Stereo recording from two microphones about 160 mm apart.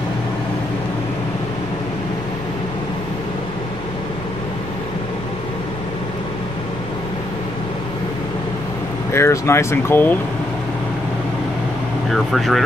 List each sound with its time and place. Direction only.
9.1 s speech: 15° left (ahead or behind)
12.1 s speech: centre (ahead or behind)